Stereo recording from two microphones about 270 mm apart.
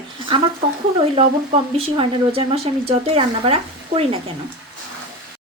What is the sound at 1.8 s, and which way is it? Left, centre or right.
Speech, right.